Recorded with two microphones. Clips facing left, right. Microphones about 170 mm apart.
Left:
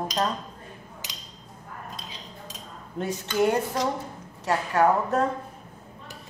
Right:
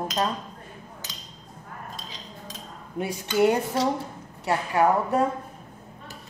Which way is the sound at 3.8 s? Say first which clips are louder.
Right 2 dB; 30° right (ahead or behind).